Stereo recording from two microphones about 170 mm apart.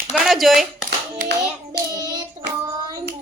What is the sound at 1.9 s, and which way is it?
Child singing, 25° right (ahead or behind).